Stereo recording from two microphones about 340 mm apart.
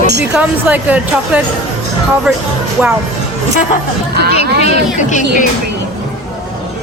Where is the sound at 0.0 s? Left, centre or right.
Right.